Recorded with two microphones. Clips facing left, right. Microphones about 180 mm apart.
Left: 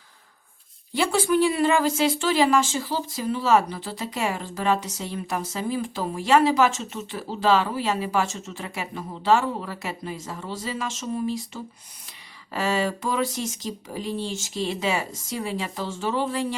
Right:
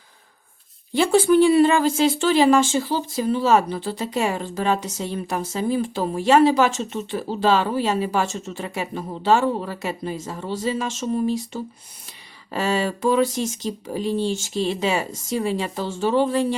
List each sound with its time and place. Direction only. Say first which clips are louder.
0.9 s speech: right 6 dB; 30° right (ahead or behind)
12.5 s speech: right 2 dB; 30° right (ahead or behind)